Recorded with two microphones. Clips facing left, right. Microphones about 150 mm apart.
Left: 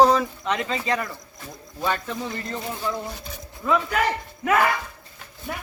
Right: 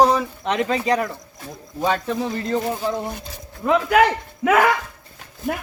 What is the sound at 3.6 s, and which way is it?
Speech, 75° right (ahead or behind).